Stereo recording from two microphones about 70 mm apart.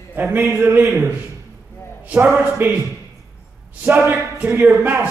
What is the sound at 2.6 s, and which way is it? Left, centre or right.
Speech, right.